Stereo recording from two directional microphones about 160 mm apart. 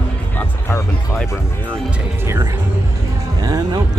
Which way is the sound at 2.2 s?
15° right (ahead or behind).